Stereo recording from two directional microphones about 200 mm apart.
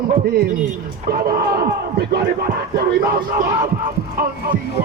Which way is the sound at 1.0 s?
45° right (ahead or behind).